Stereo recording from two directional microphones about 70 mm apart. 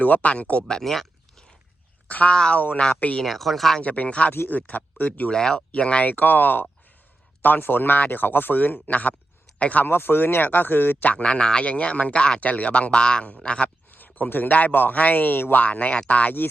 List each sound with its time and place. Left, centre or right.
0.0 s speech: left
0.8 s a sound: centre
2.0 s speech: left
3.2 s speech: centre
3.8 s speech: left
5.3 s speech: centre
9.8 s speech: left; by 13.7 s centre
13.9 s speech: left